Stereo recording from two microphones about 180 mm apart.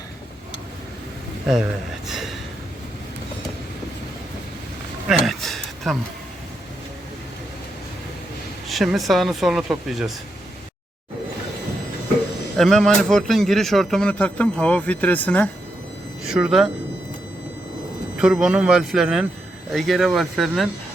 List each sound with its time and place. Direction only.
2.0 s a man's voice: centre (ahead or behind)
5.0 s a sound: centre (ahead or behind)
8.7 s a man's voice: centre (ahead or behind)
12.5 s a man's voice: centre (ahead or behind)
16.2 s speech: 5° right (ahead or behind)
18.2 s a man's voice: 5° right (ahead or behind)